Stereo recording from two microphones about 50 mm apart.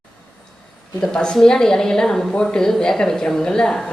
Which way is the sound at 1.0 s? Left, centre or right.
Centre.